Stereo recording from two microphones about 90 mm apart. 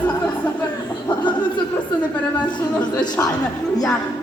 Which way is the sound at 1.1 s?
55° left (ahead or behind).